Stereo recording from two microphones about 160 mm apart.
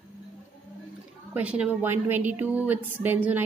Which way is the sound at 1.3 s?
10° right (ahead or behind).